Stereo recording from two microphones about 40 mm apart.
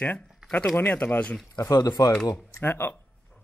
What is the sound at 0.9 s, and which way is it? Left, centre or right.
Speech, left.